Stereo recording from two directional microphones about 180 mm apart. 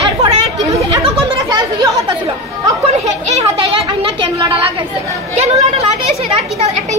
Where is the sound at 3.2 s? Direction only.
35° right (ahead or behind).